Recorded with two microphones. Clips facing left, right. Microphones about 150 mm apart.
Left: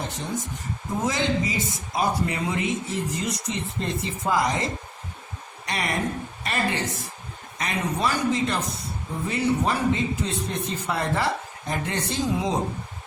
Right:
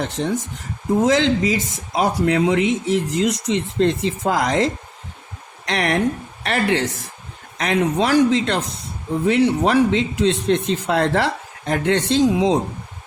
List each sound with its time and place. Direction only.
1.0 s speech: 90° right
6.4 s speech: 80° right